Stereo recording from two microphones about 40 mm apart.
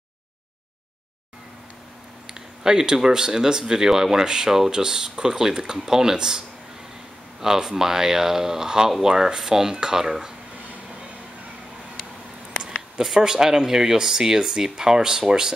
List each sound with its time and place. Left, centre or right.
2.3 s speech: centre
13.0 s speech: centre